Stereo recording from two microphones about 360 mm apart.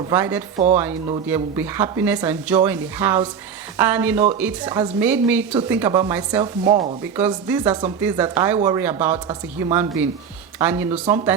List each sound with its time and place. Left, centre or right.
0.1 s speech: centre